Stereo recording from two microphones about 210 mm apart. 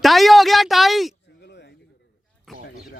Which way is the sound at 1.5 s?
50° left (ahead or behind).